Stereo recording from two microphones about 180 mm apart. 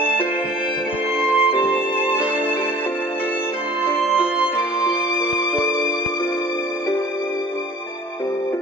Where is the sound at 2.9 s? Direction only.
10° left (ahead or behind).